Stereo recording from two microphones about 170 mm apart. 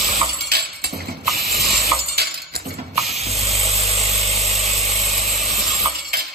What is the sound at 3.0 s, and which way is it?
Spray, 40° right (ahead or behind).